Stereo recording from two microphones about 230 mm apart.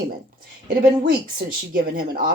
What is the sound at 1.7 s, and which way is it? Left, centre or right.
Speech, right.